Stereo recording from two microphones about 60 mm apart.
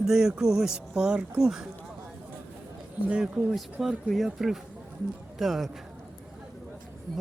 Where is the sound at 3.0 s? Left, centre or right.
Right.